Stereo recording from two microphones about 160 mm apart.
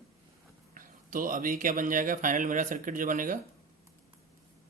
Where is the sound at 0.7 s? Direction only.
60° right (ahead or behind).